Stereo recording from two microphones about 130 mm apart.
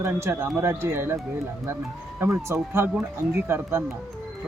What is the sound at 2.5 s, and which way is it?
Speech, 20° right (ahead or behind).